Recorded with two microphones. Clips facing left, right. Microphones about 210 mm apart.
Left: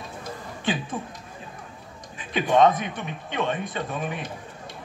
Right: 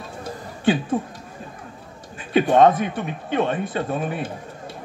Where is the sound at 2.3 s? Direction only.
45° right (ahead or behind).